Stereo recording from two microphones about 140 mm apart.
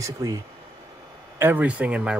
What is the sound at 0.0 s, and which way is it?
Speech, 25° right (ahead or behind).